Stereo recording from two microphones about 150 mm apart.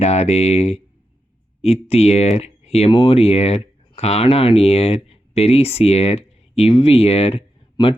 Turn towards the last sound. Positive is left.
turn(degrees=40)  # may be behind; listen again after turning